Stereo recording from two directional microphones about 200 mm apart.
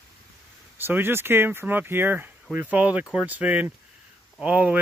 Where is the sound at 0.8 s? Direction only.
10° right (ahead or behind).